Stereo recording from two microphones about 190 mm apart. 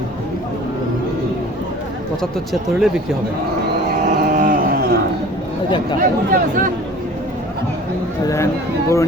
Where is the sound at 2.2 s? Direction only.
Centre (ahead or behind).